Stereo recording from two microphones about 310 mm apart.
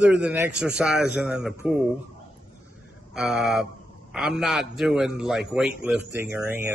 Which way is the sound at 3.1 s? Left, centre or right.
Centre.